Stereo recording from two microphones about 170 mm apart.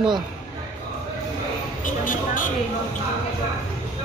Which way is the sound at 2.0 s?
50° left (ahead or behind).